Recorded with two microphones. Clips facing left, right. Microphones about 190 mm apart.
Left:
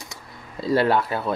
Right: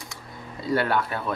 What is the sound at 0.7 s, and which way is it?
Speech, 25° left (ahead or behind).